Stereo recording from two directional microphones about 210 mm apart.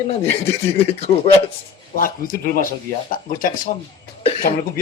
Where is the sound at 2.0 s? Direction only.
40° left (ahead or behind).